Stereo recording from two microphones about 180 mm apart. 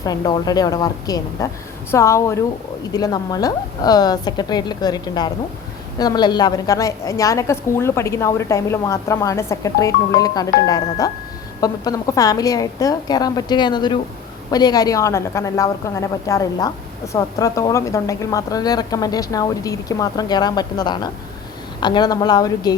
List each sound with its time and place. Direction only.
0.0 s a woman's voice: 20° left (ahead or behind)